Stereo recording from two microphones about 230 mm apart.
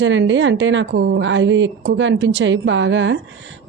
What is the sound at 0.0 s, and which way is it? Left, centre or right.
A woman's voice, right.